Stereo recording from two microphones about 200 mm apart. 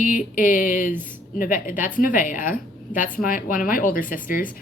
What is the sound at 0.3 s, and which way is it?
Speech, 45° left (ahead or behind).